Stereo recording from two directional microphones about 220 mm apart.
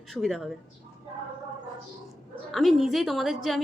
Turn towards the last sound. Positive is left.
turn(degrees=0)  # may be behind; listen again after turning